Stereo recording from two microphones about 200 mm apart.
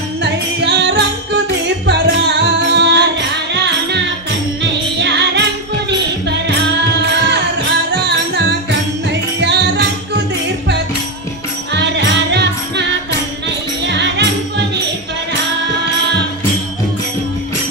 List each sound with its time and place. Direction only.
0.2 s music: 60° right (ahead or behind)
11.7 s music: 60° right (ahead or behind)
13.8 s music: 60° right (ahead or behind)